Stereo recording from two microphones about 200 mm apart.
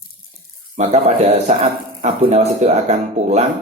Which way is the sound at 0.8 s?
35° right (ahead or behind).